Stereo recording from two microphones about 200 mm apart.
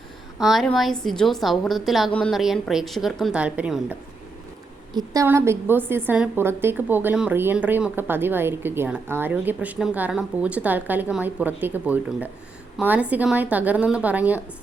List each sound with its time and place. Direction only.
0.3 s a woman's voice: centre (ahead or behind)
4.9 s a woman's voice: 15° right (ahead or behind)